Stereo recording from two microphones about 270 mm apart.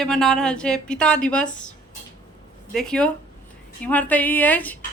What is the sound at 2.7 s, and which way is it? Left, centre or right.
A woman's voice, centre.